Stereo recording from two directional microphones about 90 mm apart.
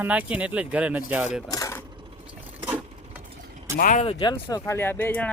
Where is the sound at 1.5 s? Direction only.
40° left (ahead or behind).